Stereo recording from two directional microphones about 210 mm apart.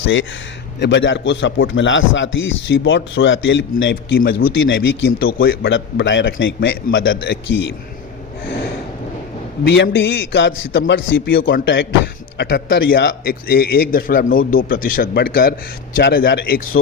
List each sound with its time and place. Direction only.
0.0 s a man's voice: 65° left (ahead or behind)
4.2 s a man's voice: 45° left (ahead or behind)
4.5 s a man's voice: 65° left (ahead or behind)
5.2 s a man's voice: 45° left (ahead or behind); by 7.7 s 60° left (ahead or behind)
9.6 s a man's voice: 55° left (ahead or behind)
11.5 s a man's voice: 55° left (ahead or behind)